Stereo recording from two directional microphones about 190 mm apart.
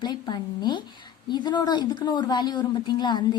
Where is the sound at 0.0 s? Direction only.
20° left (ahead or behind).